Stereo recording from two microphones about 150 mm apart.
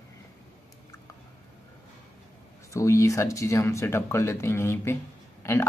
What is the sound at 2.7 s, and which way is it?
A man's voice, 20° left (ahead or behind).